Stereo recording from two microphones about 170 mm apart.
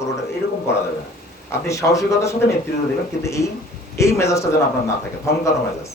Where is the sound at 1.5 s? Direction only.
20° left (ahead or behind).